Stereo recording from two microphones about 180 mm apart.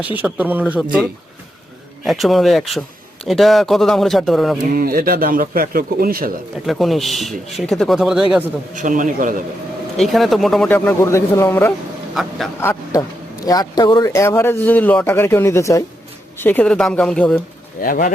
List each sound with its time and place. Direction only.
0.2 s a man's voice: 10° right (ahead or behind)
2.0 s speech: centre (ahead or behind)
4.7 s speech: 50° right (ahead or behind)
6.7 s speech: centre (ahead or behind)
8.7 s speech: 45° right (ahead or behind)
10.0 s speech: centre (ahead or behind)
12.2 s speech: centre (ahead or behind)
12.5 s speech: 15° left (ahead or behind)
17.7 s speech: 50° left (ahead or behind)